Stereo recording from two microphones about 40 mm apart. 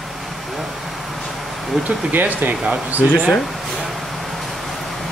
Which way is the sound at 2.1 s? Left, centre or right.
Right.